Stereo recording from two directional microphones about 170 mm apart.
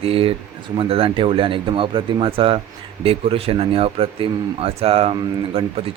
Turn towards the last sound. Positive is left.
turn(degrees=-35)  # may be behind; listen again after turning